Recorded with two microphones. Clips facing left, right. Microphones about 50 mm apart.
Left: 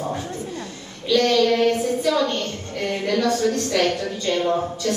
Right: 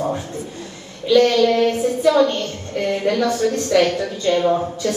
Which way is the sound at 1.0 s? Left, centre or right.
Right.